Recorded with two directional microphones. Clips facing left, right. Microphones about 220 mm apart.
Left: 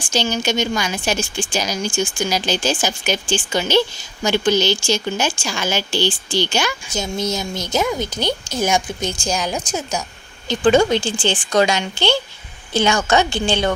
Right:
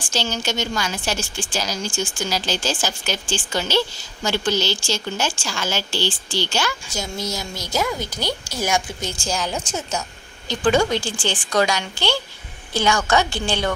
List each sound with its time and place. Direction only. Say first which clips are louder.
0.1 s a woman's voice: left 5 dB; 15° left (ahead or behind)